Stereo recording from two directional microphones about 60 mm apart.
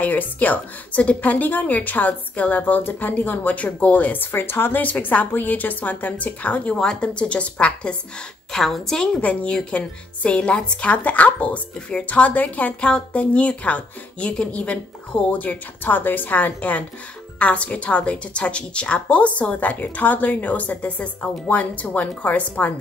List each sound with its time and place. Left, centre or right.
0.0 s a woman's voice: left
6.7 s a woman's voice: centre
8.5 s a woman's voice: centre
9.2 s a woman's voice: left